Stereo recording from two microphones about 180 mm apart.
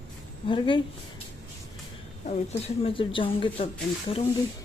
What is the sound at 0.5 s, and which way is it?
Speech, 25° left (ahead or behind).